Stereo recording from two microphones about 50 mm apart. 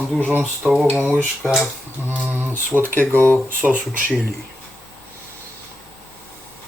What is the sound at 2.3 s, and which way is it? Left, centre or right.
Speech, right.